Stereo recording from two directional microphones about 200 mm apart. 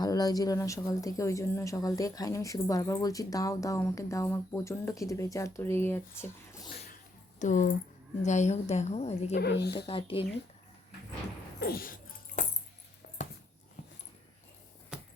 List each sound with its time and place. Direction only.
0.0 s speech: 20° left (ahead or behind)
6.8 s a sound: 40° left (ahead or behind)
8.2 s a woman's voice: 35° left (ahead or behind)
9.3 s speech: 55° left (ahead or behind)
9.7 s speech: 25° left (ahead or behind)
11.6 s dog: 50° left (ahead or behind)